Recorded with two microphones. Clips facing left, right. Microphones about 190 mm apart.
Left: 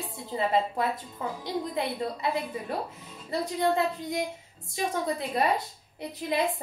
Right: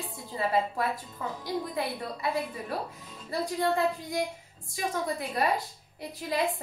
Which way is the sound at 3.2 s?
20° left (ahead or behind).